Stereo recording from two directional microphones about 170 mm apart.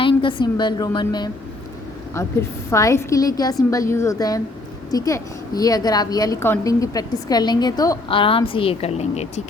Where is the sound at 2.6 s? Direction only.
15° left (ahead or behind).